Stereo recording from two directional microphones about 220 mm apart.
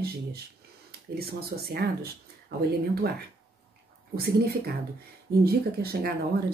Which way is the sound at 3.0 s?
45° right (ahead or behind).